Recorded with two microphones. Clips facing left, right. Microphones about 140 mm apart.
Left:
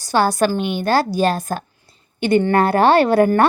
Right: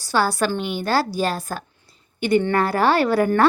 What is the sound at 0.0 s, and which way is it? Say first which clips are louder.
Speech: left 4 dB; 20° left (ahead or behind).